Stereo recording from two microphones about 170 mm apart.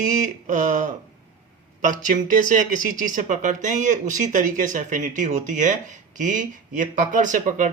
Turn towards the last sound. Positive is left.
turn(degrees=-50)  # may be behind; listen again after turning